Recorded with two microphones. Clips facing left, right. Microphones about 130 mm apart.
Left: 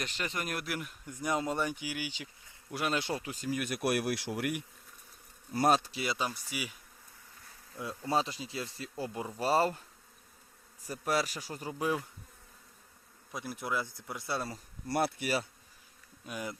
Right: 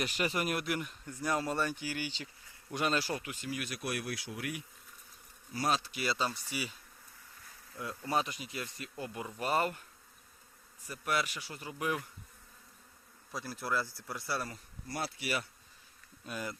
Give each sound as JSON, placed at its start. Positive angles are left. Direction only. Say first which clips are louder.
{"t": 0.0, "sound": "speech", "louder": "right 4 dB", "side_deg": -10}
{"t": 1.1, "sound": "speech", "louder": "left 1 dB", "side_deg": 20}
{"t": 3.0, "sound": "speech", "louder": "left 2 dB", "side_deg": 30}
{"t": 5.5, "sound": "speech", "louder": "left 6 dB", "side_deg": 50}
{"t": 5.9, "sound": "speech", "louder": "even", "side_deg": 20}
{"t": 7.8, "sound": "speech", "louder": "left 2 dB", "side_deg": 20}
{"t": 10.8, "sound": "a man's voice", "louder": "left 3 dB", "side_deg": 40}
{"t": 13.3, "sound": "speech", "louder": "even", "side_deg": 20}
{"t": 14.9, "sound": "speech", "louder": "left 8 dB", "side_deg": 55}
{"t": 16.2, "sound": "speech", "louder": "left 1 dB", "side_deg": 15}